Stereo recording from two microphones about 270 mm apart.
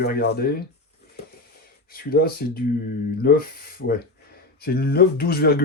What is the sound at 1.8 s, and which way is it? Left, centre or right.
Speech, left.